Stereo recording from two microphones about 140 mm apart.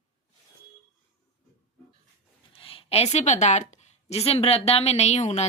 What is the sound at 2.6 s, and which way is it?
A woman's voice, 40° left (ahead or behind).